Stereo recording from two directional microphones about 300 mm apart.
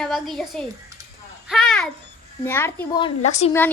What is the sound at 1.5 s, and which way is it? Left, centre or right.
Babbling, centre.